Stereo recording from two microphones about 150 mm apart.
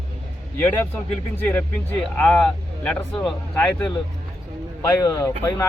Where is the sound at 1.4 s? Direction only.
10° left (ahead or behind).